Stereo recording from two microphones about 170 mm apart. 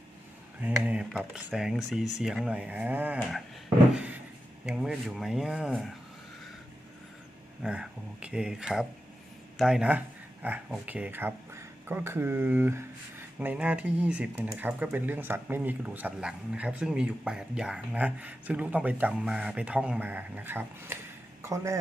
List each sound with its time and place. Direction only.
0.6 s speech: 10° right (ahead or behind)
3.9 s a sound: 10° right (ahead or behind)
4.6 s speech: 5° right (ahead or behind)
7.6 s speech: 5° right (ahead or behind)